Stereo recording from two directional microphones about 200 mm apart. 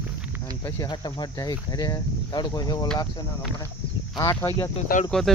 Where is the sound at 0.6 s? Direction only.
20° left (ahead or behind).